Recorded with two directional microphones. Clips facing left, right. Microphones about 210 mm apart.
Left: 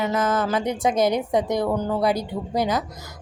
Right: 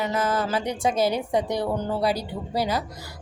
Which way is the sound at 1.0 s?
15° left (ahead or behind).